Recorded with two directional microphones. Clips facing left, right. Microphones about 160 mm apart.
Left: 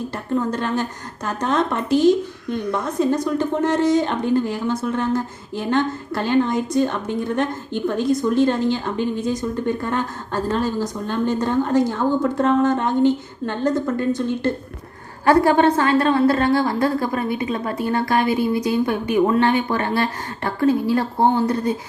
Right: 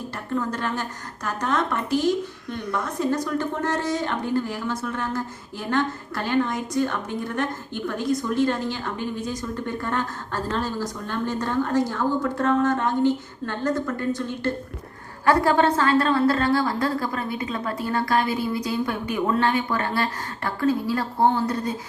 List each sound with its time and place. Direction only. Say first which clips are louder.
0.3 s a woman's voice: left 5 dB; 25° left (ahead or behind)